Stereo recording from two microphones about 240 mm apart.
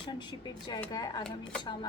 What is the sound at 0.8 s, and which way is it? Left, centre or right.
Speech, centre.